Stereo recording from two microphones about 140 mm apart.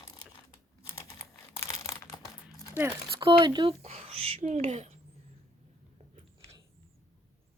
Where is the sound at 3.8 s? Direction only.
50° right (ahead or behind).